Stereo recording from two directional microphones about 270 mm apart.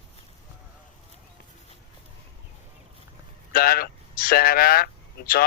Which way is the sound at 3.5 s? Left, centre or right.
Left.